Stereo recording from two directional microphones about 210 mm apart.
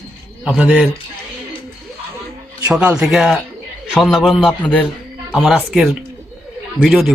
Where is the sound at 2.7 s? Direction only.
5° right (ahead or behind).